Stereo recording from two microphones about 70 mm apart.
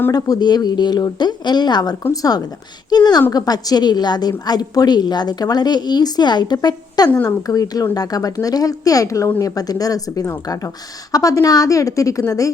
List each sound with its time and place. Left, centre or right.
0.1 s a woman's voice: left
7.3 s a woman's voice: left
9.4 s a woman's voice: left